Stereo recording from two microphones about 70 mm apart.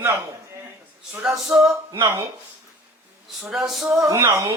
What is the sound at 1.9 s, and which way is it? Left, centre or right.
Speech, right.